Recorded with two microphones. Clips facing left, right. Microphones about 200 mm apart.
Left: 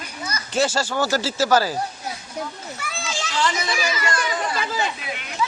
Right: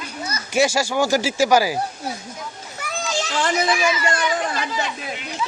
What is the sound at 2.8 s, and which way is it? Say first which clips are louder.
Children playing: right 6 dB; 40° right (ahead or behind).